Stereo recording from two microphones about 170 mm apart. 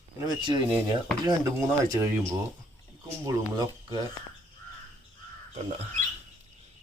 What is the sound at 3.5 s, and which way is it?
Speech, 25° right (ahead or behind).